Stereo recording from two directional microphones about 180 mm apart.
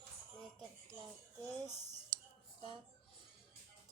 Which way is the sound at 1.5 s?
20° right (ahead or behind).